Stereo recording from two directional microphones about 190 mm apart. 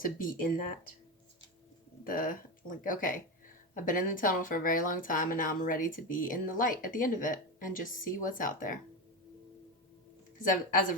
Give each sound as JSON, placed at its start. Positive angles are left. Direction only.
{"t": 0.0, "sound": "speech", "side_deg": 45}
{"t": 2.0, "sound": "speech", "side_deg": 50}
{"t": 10.3, "sound": "speech", "side_deg": 45}